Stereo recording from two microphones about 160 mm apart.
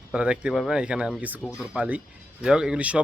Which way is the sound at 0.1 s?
5° right (ahead or behind).